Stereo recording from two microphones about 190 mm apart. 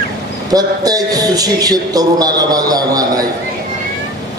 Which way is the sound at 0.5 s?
20° right (ahead or behind).